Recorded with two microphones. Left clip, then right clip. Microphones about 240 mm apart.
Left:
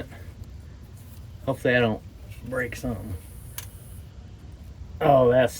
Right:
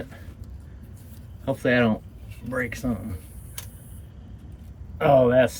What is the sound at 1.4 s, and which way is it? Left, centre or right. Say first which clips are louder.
Speech: even; right.